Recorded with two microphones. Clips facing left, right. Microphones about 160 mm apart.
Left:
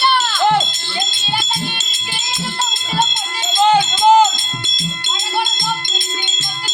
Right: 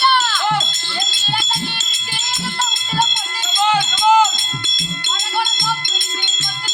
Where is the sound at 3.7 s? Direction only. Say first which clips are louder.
Left 3 dB; 30° left (ahead or behind).